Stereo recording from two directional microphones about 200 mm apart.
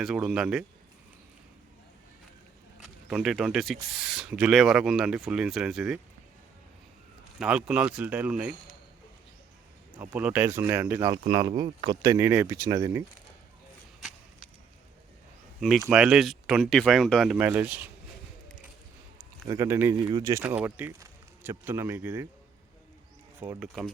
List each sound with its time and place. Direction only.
0.0 s speech: 5° right (ahead or behind)
2.8 s speech: centre (ahead or behind)
7.3 s speech: 5° right (ahead or behind)
9.9 s speech: 5° right (ahead or behind)
11.3 s speech: 20° right (ahead or behind)
14.0 s a sound: 5° left (ahead or behind)
15.9 s speech: 5° right (ahead or behind)
19.5 s speech: 15° right (ahead or behind)
20.0 s speech: 25° right (ahead or behind)
23.4 s speech: 10° right (ahead or behind)
23.6 s speech: centre (ahead or behind)